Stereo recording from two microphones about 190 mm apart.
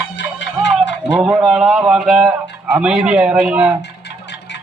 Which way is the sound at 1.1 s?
5° right (ahead or behind).